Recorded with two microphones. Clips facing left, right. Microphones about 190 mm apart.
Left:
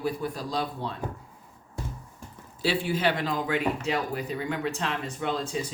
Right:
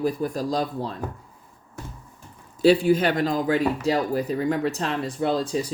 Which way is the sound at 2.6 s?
45° right (ahead or behind).